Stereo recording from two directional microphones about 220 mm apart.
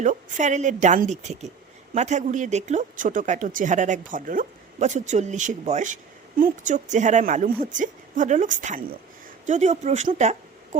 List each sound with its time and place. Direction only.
0.0 s speech: 35° right (ahead or behind)